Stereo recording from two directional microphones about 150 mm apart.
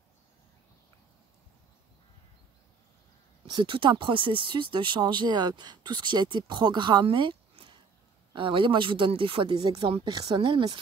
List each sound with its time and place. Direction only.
3.4 s speech: 30° right (ahead or behind)